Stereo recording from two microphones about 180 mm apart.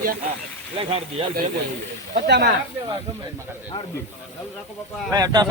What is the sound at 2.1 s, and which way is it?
Speech, 65° right (ahead or behind).